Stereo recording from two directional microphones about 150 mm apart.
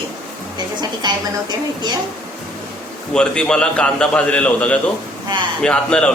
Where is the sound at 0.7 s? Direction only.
30° right (ahead or behind).